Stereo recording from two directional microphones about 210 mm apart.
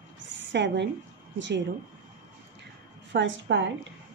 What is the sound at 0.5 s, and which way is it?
Speech, 55° right (ahead or behind).